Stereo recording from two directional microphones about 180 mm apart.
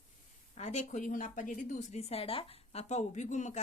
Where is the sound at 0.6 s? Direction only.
40° left (ahead or behind).